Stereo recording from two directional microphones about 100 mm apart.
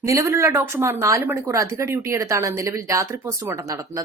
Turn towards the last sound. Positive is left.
turn(degrees=-35)  # may be behind; listen again after turning